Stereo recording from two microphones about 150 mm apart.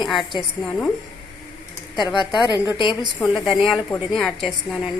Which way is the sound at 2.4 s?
30° left (ahead or behind).